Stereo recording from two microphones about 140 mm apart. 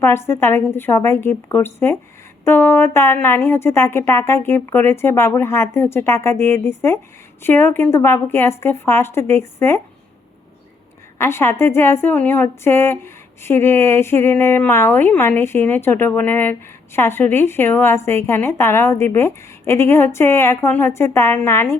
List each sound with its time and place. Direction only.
0.0 s speech: 20° left (ahead or behind)
11.2 s speech: 15° left (ahead or behind)